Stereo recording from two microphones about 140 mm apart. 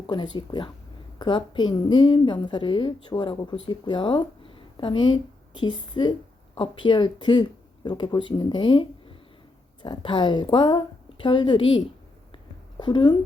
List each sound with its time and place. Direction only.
0.1 s a woman's voice: 35° left (ahead or behind)
12.8 s a woman's voice: 35° left (ahead or behind)